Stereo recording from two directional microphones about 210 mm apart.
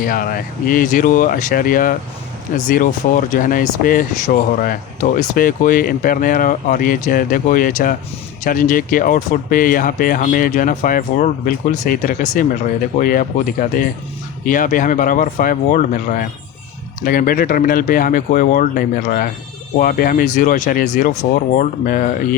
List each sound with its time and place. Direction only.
0.0 s speech: 40° left (ahead or behind)